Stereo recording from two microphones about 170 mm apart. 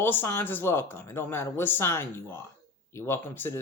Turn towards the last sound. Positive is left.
turn(degrees=10)  # may be behind; listen again after turning